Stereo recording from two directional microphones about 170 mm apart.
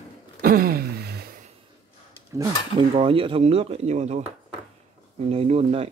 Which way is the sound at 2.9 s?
35° right (ahead or behind).